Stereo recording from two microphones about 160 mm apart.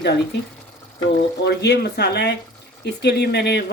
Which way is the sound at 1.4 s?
90° left.